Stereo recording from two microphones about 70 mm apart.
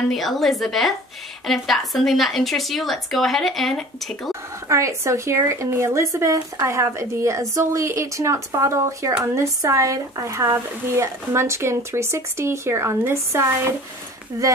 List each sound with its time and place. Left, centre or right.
0.1 s a woman's voice: centre
4.3 s speech: right